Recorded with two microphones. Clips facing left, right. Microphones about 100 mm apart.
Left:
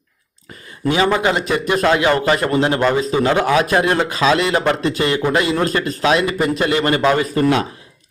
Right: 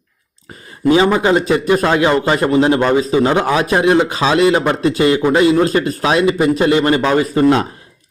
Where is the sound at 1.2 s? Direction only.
30° right (ahead or behind).